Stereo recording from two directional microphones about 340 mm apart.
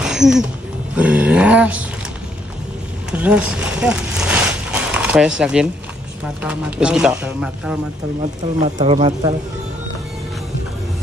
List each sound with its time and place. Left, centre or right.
0.0 s music: centre
0.9 s speech: centre
3.1 s a sound: centre
5.4 s speech: centre
8.5 s speech: centre